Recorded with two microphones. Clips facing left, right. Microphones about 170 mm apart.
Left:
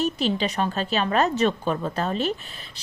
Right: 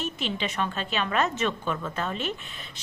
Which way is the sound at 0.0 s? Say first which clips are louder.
Left 7 dB; 35° left (ahead or behind).